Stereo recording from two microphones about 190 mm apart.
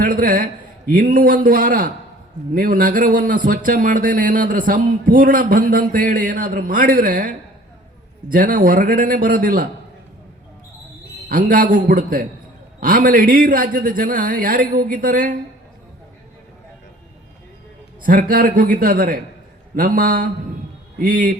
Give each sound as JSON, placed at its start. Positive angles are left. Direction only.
{"t": 0.0, "sound": "a man's voice", "side_deg": -45}
{"t": 11.3, "sound": "speech", "side_deg": -45}
{"t": 18.0, "sound": "speech", "side_deg": -45}